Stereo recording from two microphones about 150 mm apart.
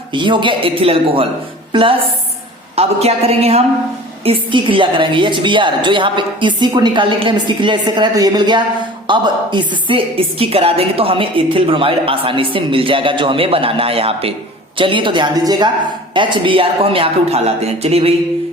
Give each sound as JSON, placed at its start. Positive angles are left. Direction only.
{"t": 0.1, "sound": "a woman's voice", "side_deg": -30}
{"t": 1.7, "sound": "music", "side_deg": -35}
{"t": 2.7, "sound": "a woman's voice", "side_deg": -45}